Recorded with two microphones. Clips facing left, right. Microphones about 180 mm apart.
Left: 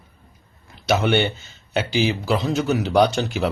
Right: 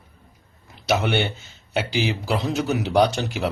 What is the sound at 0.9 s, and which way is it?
Speech, 10° right (ahead or behind).